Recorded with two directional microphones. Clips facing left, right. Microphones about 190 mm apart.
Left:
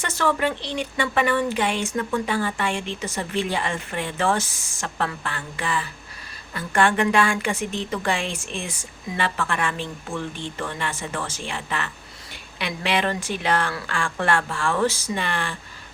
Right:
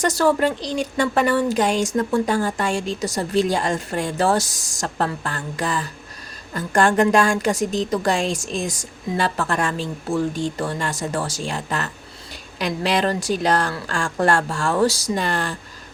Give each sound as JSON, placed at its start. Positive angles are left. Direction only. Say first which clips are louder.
{"t": 0.0, "sound": "speech", "louder": "right 5 dB", "side_deg": -40}